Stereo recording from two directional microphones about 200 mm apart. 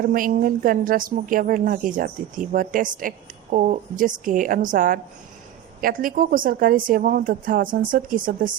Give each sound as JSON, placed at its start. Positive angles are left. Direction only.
{"t": 0.0, "sound": "a woman's voice", "side_deg": -45}